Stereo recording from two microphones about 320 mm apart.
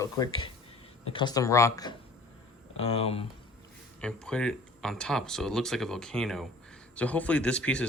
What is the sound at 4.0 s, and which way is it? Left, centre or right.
Speech, centre.